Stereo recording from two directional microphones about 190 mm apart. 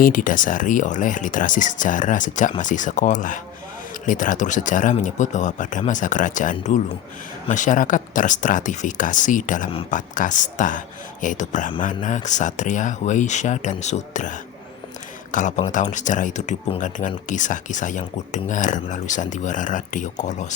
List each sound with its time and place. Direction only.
0.0 s speech: 45° left (ahead or behind)